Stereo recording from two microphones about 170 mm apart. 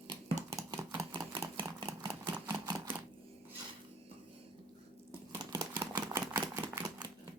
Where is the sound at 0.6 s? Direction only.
20° right (ahead or behind).